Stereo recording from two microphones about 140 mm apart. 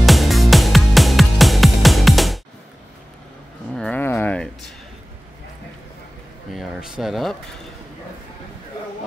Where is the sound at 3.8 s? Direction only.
10° left (ahead or behind).